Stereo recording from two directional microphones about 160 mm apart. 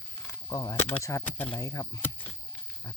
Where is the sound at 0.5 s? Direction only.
20° left (ahead or behind).